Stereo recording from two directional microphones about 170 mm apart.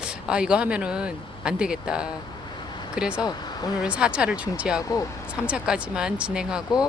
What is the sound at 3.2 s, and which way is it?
Speech, 25° left (ahead or behind).